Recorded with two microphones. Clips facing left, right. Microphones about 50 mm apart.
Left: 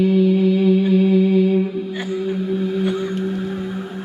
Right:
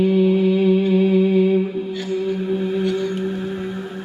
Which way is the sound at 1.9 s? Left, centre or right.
Left.